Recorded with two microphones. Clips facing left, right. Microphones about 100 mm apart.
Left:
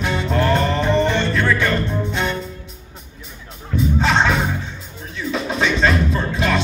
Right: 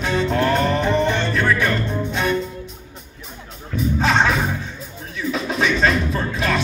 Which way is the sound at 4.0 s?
20° left (ahead or behind).